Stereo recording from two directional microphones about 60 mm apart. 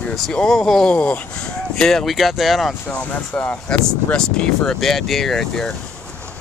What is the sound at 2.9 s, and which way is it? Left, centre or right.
Speech, left.